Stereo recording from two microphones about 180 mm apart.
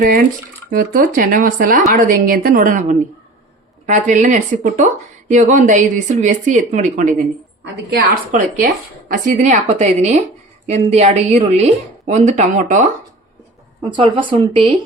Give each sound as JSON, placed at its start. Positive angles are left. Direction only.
{"t": 0.0, "sound": "speech", "side_deg": -50}
{"t": 7.6, "sound": "a woman's voice", "side_deg": -65}
{"t": 8.3, "sound": "a woman's voice", "side_deg": -45}
{"t": 13.8, "sound": "speech", "side_deg": -25}